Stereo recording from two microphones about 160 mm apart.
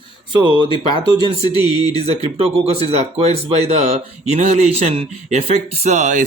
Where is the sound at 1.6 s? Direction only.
25° left (ahead or behind).